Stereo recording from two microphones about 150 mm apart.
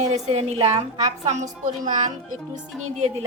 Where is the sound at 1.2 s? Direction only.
50° right (ahead or behind).